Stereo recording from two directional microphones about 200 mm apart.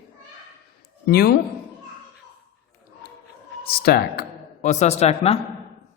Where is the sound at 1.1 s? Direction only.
50° left (ahead or behind).